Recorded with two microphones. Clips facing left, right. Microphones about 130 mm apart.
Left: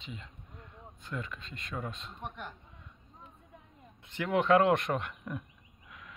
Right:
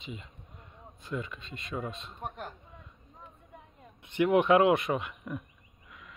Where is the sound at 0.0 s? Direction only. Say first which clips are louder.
Right 3 dB; 10° right (ahead or behind).